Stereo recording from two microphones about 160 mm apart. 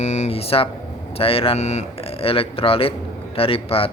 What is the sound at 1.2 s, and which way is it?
Speech, 35° left (ahead or behind).